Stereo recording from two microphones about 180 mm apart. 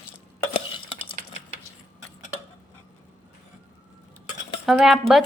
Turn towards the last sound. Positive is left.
turn(degrees=0)  # may be behind; listen again after turning